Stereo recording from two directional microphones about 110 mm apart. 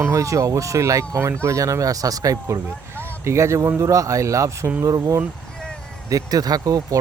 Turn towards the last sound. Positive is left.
turn(degrees=-35)  # may be behind; listen again after turning